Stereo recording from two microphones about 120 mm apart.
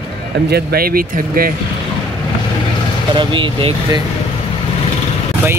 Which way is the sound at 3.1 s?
45° right (ahead or behind).